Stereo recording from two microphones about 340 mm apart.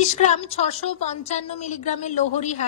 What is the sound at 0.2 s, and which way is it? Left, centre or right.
A woman's voice, centre.